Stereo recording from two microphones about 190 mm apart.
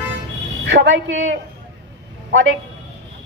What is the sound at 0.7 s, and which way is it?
Speech, 70° right (ahead or behind).